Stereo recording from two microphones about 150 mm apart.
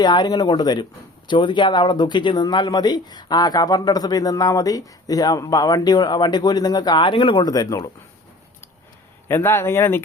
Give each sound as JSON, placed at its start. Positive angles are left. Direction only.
{"t": 0.0, "sound": "speech", "side_deg": 30}
{"t": 9.3, "sound": "speech", "side_deg": 15}